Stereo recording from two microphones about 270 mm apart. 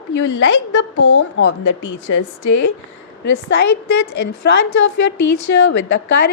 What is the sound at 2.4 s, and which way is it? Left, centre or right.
A woman's voice, left.